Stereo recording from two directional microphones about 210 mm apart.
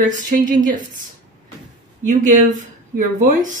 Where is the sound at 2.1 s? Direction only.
40° right (ahead or behind).